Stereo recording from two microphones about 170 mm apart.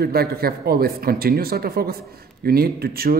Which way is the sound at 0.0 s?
65° right (ahead or behind).